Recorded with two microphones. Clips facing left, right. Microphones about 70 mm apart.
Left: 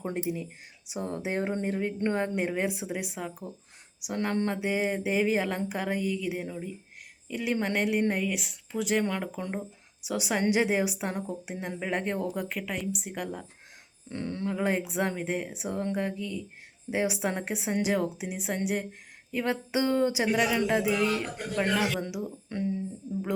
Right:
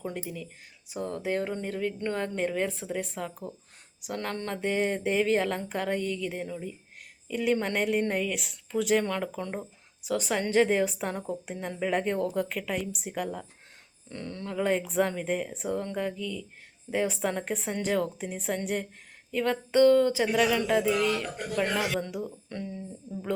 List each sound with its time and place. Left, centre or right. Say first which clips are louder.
0.0 s a woman's voice: left 4 dB; left; by 13.5 s centre
14.1 s speech: left 4 dB; left